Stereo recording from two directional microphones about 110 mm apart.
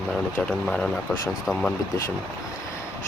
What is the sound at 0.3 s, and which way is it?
Speech, 10° left (ahead or behind).